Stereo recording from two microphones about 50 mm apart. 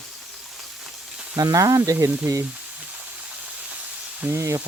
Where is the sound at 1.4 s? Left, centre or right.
Right.